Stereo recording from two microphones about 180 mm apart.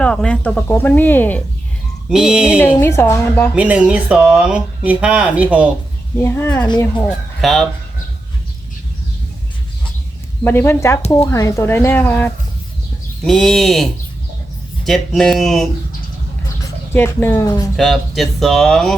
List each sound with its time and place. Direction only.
0.0 s speech: 5° left (ahead or behind)
2.0 s speech: 5° right (ahead or behind)
2.7 s speech: 15° left (ahead or behind)
3.5 s speech: 10° right (ahead or behind)
6.2 s speech: 15° left (ahead or behind)
6.7 s speech: 25° left (ahead or behind)
7.4 s speech: centre (ahead or behind)
10.4 s speech: 10° left (ahead or behind)
14.8 s speech: centre (ahead or behind)
16.9 s speech: 10° left (ahead or behind)
17.7 s speech: centre (ahead or behind)